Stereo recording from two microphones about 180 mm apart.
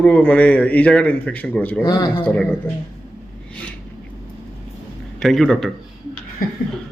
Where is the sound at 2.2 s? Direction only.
10° left (ahead or behind).